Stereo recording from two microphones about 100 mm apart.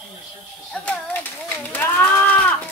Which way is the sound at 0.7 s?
10° left (ahead or behind).